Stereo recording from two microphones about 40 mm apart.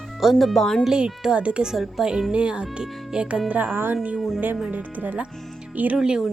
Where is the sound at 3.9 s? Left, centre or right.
Right.